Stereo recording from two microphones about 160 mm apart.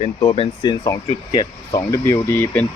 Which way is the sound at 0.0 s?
25° left (ahead or behind).